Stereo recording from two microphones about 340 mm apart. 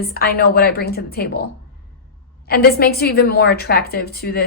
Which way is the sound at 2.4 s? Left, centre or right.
Left.